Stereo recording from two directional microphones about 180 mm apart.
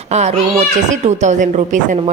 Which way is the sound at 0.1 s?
40° right (ahead or behind).